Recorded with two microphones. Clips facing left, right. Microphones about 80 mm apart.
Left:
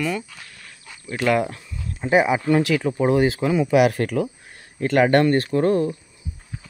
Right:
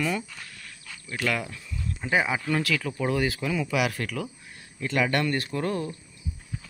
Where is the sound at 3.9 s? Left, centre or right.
Left.